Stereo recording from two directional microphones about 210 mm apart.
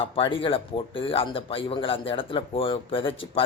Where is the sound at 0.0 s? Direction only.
25° left (ahead or behind).